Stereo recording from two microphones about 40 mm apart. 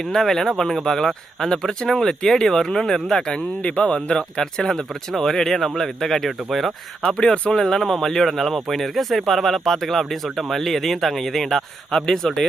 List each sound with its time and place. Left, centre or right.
0.0 s speech: centre
3.6 s speech: left
3.9 s speech: centre
7.1 s speech: left
7.6 s speech: centre